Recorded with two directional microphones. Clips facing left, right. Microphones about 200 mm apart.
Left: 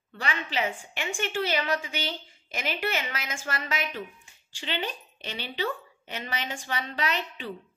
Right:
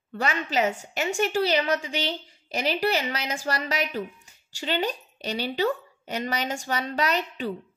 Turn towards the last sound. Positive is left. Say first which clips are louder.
# right 5 dB
turn(degrees=-40)  # may be behind; listen again after turning